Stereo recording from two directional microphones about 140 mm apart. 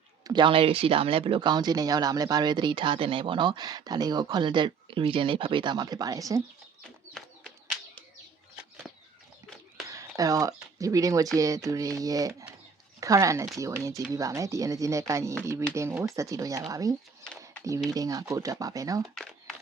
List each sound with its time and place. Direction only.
0.3 s speech: 35° right (ahead or behind)
9.9 s speech: 25° right (ahead or behind)
17.9 s speech: 25° right (ahead or behind)
19.1 s a sound: centre (ahead or behind)